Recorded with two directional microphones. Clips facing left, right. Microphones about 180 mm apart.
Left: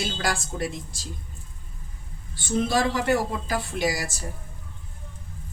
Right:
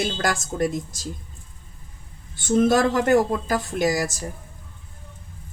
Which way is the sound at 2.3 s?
50° right (ahead or behind).